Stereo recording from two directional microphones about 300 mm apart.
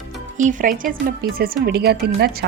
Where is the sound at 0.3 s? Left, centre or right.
Right.